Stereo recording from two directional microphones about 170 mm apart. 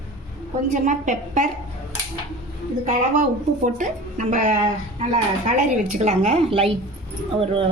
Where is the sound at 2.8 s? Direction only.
45° right (ahead or behind).